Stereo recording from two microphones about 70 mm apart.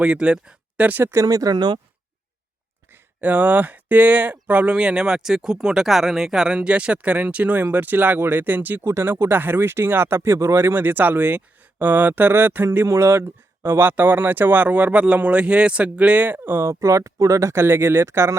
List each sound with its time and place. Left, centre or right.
0.0 s speech: centre
1.2 s speech: right
3.2 s speech: right